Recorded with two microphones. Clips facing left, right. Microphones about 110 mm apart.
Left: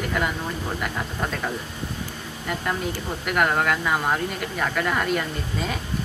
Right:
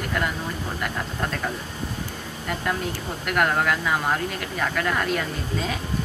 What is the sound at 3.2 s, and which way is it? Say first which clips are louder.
Speech: even; 5° left (ahead or behind).